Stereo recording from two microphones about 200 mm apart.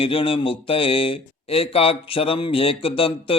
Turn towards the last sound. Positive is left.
turn(degrees=25)  # may be behind; listen again after turning